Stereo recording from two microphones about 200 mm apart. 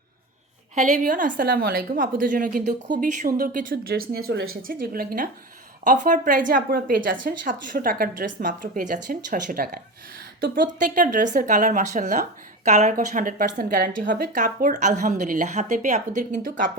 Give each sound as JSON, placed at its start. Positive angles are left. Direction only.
{"t": 0.8, "sound": "a woman's voice", "side_deg": -40}